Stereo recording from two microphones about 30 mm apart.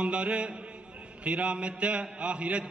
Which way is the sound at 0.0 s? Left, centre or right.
Right.